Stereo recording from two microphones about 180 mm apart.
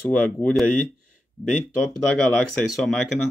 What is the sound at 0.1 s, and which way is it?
Speech, 5° left (ahead or behind).